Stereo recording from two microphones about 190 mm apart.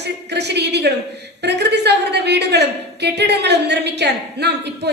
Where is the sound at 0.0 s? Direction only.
60° right (ahead or behind).